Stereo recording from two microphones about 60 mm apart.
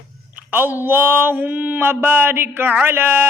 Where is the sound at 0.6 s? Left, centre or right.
Right.